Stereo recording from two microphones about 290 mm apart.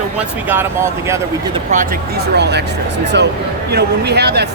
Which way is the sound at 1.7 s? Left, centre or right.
Right.